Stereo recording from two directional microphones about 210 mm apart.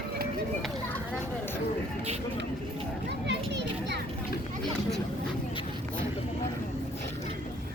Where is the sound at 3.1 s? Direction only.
55° right (ahead or behind).